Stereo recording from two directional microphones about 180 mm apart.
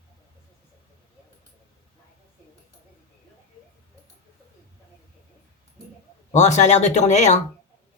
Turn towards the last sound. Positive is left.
turn(degrees=40)  # may be behind; listen again after turning